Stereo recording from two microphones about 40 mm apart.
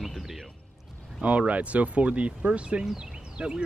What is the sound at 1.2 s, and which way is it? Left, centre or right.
Speech, right.